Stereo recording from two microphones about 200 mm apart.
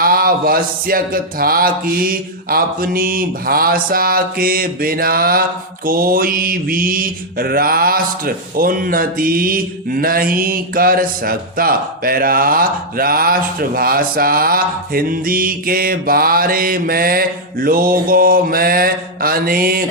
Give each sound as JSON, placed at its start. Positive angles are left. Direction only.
{"t": 0.0, "sound": "speech", "side_deg": -45}